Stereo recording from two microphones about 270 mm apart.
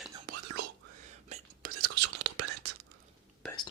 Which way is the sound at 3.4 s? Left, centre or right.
Centre.